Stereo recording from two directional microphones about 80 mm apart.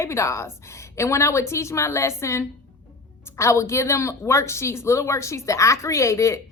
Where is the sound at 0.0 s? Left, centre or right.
Left.